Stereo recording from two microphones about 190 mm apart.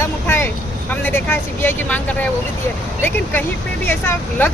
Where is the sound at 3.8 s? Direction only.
10° left (ahead or behind).